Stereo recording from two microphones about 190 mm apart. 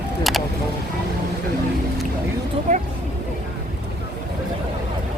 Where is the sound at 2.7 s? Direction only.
45° right (ahead or behind).